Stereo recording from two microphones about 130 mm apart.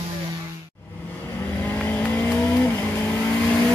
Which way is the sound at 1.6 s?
15° left (ahead or behind).